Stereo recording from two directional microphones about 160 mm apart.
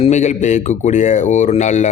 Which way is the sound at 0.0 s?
45° left (ahead or behind).